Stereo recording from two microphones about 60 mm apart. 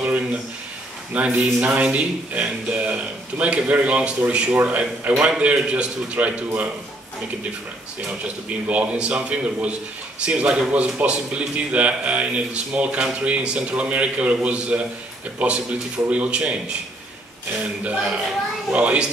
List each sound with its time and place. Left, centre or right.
0.0 s a sound: right
1.1 s a man's voice: right
8.5 s a man's voice: right